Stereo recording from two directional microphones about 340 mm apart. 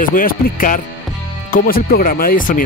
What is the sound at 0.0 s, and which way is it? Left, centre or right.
Speech, left.